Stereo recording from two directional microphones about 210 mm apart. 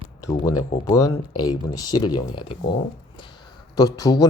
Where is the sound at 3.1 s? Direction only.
20° left (ahead or behind).